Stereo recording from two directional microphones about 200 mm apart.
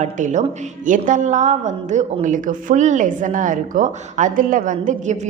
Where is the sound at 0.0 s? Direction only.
35° right (ahead or behind).